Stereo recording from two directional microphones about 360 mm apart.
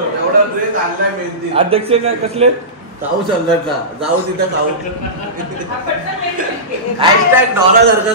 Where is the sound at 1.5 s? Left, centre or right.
Centre.